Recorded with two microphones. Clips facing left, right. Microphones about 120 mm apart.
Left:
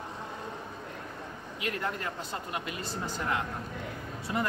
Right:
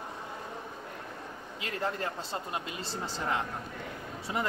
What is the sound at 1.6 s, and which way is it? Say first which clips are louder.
A man's voice: even; 30° right (ahead or behind).